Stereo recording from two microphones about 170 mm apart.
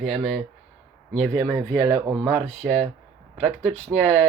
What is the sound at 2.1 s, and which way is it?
Speech, centre (ahead or behind).